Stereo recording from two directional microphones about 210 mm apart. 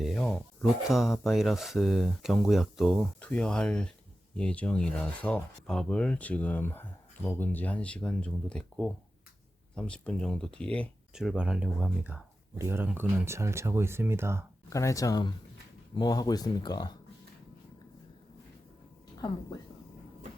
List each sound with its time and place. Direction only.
0.0 s speech: centre (ahead or behind)
14.7 s speech: 15° left (ahead or behind)